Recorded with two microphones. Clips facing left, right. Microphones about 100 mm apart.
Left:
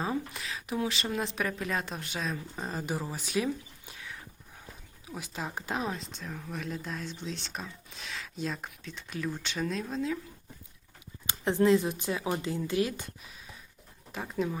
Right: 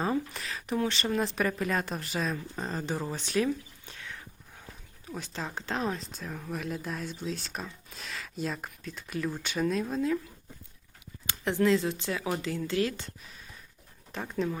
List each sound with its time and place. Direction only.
0.0 s speech: centre (ahead or behind)
11.6 s speech: 20° left (ahead or behind)
14.1 s speech: 5° left (ahead or behind)